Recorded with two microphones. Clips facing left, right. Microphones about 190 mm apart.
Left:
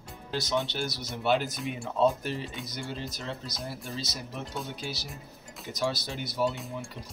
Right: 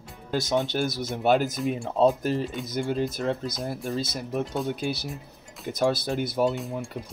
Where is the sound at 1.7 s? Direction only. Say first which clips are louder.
Right 3 dB; 35° right (ahead or behind).